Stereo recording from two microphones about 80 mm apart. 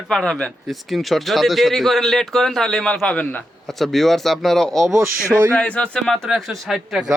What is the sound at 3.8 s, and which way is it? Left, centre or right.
Speech, centre.